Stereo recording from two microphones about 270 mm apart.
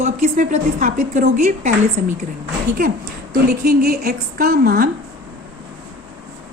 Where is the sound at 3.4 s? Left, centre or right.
Right.